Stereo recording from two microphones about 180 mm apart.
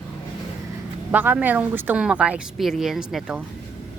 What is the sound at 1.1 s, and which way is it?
Speech, 10° right (ahead or behind).